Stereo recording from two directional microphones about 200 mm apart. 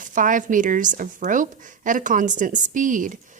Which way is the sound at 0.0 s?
40° right (ahead or behind).